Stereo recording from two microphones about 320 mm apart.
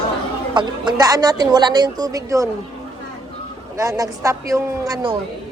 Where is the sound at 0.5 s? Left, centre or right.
Centre.